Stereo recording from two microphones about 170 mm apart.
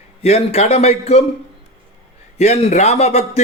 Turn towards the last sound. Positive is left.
turn(degrees=40)  # may be behind; listen again after turning